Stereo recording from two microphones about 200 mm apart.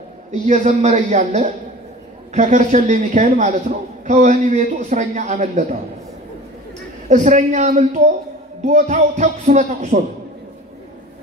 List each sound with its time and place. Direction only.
0.3 s a man's voice: 35° right (ahead or behind)
7.1 s a man's voice: 35° right (ahead or behind)